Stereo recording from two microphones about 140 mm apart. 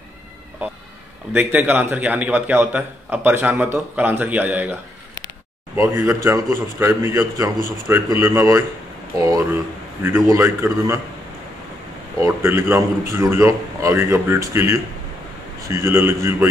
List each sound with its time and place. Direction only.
1.3 s a man's voice: 10° right (ahead or behind)
5.8 s a man's voice: 20° right (ahead or behind)
12.2 s a man's voice: 20° right (ahead or behind)